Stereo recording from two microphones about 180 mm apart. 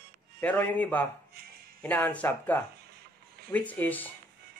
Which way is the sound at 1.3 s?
60° right (ahead or behind).